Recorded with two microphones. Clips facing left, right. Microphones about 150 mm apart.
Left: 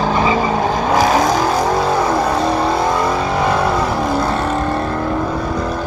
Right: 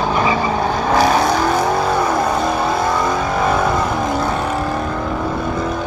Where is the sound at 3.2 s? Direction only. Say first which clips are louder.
Left 1 dB; 25° left (ahead or behind).